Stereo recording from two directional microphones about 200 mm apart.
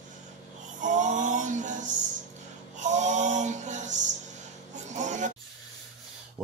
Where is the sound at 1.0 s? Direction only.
40° right (ahead or behind).